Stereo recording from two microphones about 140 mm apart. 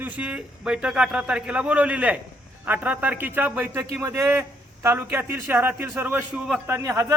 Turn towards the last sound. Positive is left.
turn(degrees=-20)  # may be behind; listen again after turning